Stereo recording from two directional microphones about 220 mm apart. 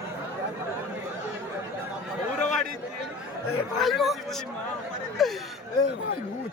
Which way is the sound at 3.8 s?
Centre (ahead or behind).